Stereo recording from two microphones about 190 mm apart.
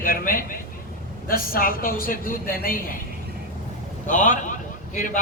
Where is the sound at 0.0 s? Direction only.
45° left (ahead or behind).